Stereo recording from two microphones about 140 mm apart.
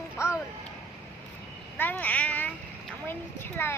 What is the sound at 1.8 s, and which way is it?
Child singing, 15° left (ahead or behind).